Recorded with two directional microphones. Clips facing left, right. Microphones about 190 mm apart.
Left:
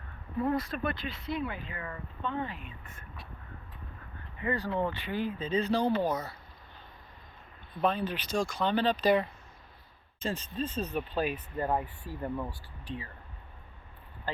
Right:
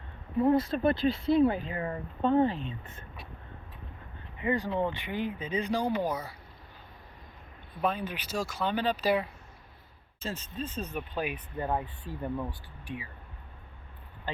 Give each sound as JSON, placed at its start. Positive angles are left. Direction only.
{"t": 0.3, "sound": "speech", "side_deg": -25}
{"t": 4.4, "sound": "speech", "side_deg": -20}
{"t": 7.8, "sound": "speech", "side_deg": -10}